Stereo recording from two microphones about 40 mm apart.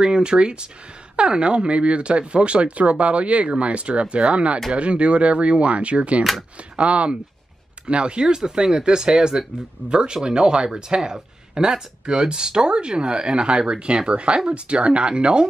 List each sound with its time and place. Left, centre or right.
0.0 s speech: right